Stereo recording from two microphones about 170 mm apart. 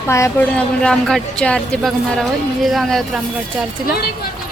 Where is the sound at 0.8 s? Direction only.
5° left (ahead or behind).